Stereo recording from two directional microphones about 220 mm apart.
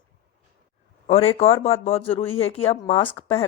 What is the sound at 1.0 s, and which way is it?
A woman's voice, 30° left (ahead or behind).